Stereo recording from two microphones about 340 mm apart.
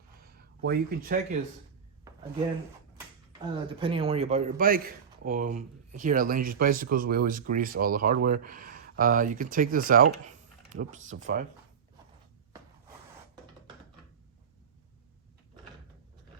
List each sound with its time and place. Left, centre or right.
0.2 s speech: right
2.1 s a sound: centre
3.3 s a man's voice: centre